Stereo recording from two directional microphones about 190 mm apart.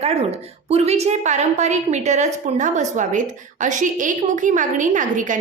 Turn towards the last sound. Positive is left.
turn(degrees=-45)  # may be behind; listen again after turning